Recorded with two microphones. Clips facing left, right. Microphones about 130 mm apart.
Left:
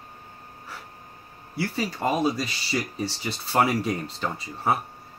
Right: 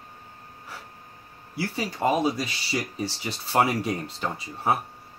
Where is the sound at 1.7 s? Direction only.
20° right (ahead or behind).